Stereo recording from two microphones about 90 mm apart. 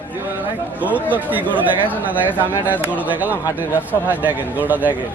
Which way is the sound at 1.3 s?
20° right (ahead or behind).